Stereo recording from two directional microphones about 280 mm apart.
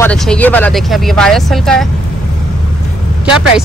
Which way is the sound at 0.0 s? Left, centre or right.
Centre.